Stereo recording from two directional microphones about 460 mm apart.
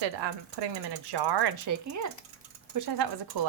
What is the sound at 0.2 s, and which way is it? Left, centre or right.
Speech, right.